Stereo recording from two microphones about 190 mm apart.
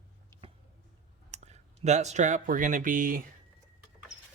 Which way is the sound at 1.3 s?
35° right (ahead or behind).